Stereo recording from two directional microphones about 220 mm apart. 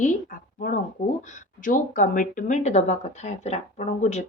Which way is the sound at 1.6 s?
35° left (ahead or behind).